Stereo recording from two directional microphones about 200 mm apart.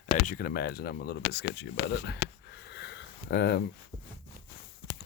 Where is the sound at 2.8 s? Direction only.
60° left (ahead or behind).